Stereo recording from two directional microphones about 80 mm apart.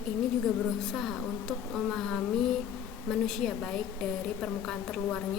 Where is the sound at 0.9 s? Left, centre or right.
Centre.